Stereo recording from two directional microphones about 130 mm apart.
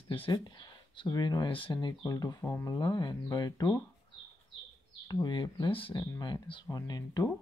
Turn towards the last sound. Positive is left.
turn(degrees=30)  # may be behind; listen again after turning